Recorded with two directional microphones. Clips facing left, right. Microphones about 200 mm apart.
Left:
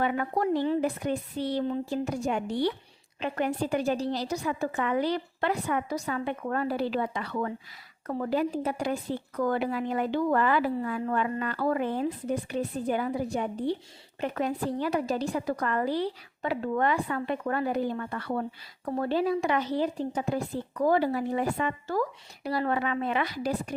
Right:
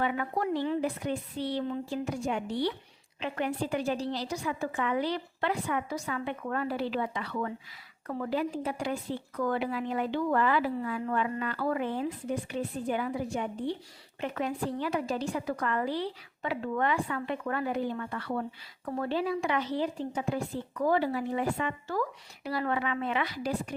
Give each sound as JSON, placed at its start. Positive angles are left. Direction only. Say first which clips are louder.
{"t": 0.0, "sound": "a woman's voice", "louder": "left 3 dB", "side_deg": 45}